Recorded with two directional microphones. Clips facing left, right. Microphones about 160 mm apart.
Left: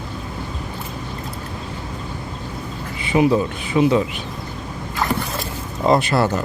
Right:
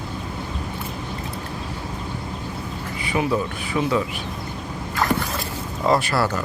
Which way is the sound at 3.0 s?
20° left (ahead or behind).